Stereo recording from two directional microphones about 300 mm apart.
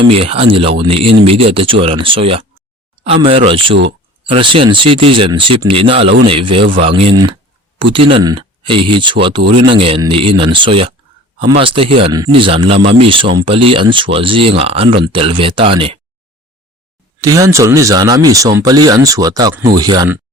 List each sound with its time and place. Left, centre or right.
0.2 s speech: centre
17.2 s speech: centre